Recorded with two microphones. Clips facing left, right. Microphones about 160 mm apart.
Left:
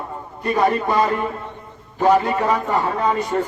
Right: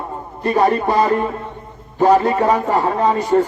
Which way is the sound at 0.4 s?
35° right (ahead or behind).